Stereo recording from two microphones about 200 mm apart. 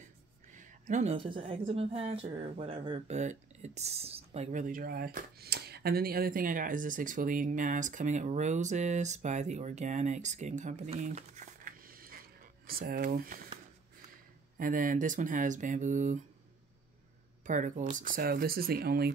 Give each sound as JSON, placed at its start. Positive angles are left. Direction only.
{"t": 0.5, "sound": "a woman's voice", "side_deg": -40}
{"t": 14.6, "sound": "a woman's voice", "side_deg": -40}
{"t": 17.5, "sound": "a woman's voice", "side_deg": -40}